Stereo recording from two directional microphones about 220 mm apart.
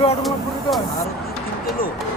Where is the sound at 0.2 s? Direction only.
Centre (ahead or behind).